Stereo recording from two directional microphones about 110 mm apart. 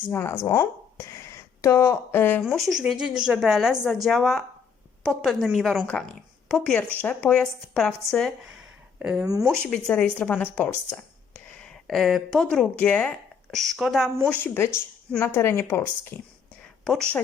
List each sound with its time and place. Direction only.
0.1 s speech: 20° left (ahead or behind)
2.6 s a woman's voice: 5° right (ahead or behind)
9.2 s speech: 30° right (ahead or behind)
9.6 s a woman's voice: 5° left (ahead or behind)
14.3 s speech: 15° left (ahead or behind)
16.8 s a woman's voice: 5° left (ahead or behind)